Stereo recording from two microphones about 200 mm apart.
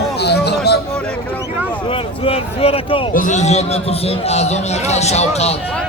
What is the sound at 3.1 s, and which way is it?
A man's voice, 40° left (ahead or behind).